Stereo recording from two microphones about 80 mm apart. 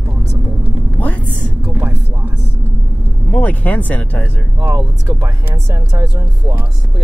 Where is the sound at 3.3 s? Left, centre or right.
Centre.